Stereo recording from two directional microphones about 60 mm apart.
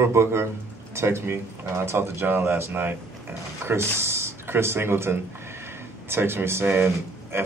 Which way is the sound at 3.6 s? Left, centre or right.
Right.